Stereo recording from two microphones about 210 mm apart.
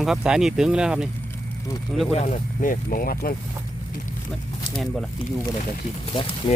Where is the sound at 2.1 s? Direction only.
35° left (ahead or behind).